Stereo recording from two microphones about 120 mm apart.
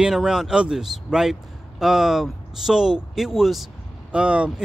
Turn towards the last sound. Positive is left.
turn(degrees=-10)  # may be behind; listen again after turning